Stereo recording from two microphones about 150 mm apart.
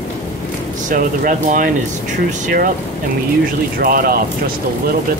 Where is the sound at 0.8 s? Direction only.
60° right (ahead or behind).